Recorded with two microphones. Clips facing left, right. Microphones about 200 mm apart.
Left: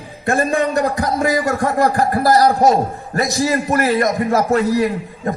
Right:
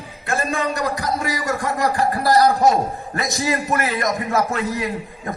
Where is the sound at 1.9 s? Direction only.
40° left (ahead or behind).